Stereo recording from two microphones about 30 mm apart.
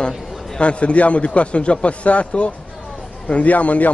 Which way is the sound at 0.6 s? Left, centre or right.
Left.